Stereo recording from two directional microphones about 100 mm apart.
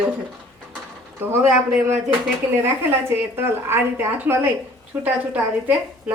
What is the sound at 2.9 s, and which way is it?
A woman's voice, 25° right (ahead or behind).